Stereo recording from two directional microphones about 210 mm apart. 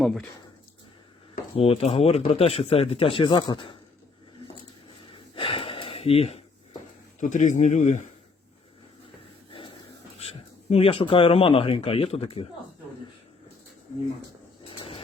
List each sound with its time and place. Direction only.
0.0 s speech: centre (ahead or behind)
1.5 s speech: 25° left (ahead or behind)
4.9 s a sound: 25° left (ahead or behind)
7.2 s speech: 35° left (ahead or behind)
10.2 s speech: 30° left (ahead or behind)
14.7 s a sound: 25° left (ahead or behind)